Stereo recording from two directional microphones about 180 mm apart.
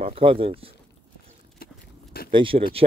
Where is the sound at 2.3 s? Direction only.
30° right (ahead or behind).